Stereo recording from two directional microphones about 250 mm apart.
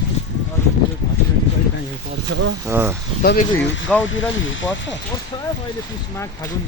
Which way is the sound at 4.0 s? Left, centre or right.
Left.